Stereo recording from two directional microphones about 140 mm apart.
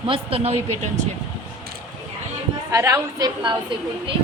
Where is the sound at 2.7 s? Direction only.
20° right (ahead or behind).